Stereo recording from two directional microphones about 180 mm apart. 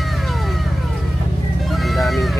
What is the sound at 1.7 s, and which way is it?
Vehicle, centre (ahead or behind).